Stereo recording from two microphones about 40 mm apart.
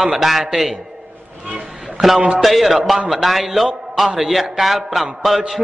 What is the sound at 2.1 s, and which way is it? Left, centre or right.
Speech, right.